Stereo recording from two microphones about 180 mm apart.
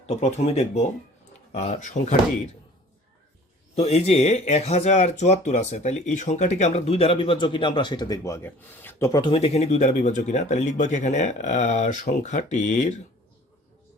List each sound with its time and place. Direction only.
0.1 s speech: 40° left (ahead or behind)
3.8 s speech: 35° left (ahead or behind); by 9.3 s 20° left (ahead or behind)
9.3 s speech: 35° left (ahead or behind)